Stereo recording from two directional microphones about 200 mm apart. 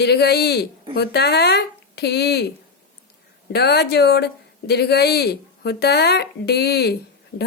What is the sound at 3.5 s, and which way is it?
Speech, 55° left (ahead or behind).